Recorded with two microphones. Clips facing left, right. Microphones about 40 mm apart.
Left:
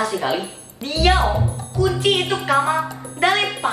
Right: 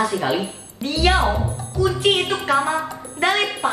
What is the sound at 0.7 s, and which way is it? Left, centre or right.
A woman's voice, centre.